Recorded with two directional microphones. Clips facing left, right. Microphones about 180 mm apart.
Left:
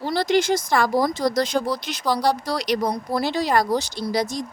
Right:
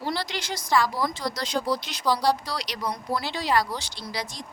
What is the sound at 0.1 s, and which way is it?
Speech, 45° left (ahead or behind).